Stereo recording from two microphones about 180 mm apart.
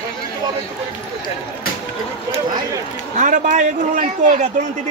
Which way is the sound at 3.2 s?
45° right (ahead or behind).